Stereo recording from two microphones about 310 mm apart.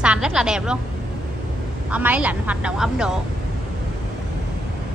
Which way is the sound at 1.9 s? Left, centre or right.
Centre.